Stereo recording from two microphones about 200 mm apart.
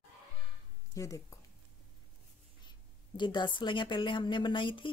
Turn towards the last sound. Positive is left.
turn(degrees=25)  # may be behind; listen again after turning